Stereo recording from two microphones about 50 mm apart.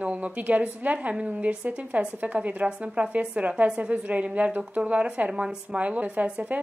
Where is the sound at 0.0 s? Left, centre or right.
Right.